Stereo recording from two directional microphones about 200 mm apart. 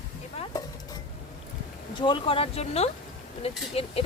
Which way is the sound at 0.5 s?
20° left (ahead or behind).